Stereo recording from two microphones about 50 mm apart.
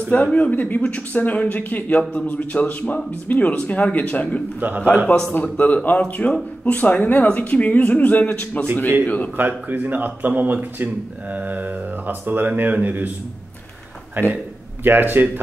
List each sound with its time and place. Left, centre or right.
0.1 s speech: left
4.6 s speech: right
5.0 s a man's voice: centre
5.3 s a man's voice: left
9.7 s speech: right
14.3 s speech: right